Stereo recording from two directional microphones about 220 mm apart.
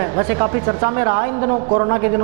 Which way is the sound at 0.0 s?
15° right (ahead or behind).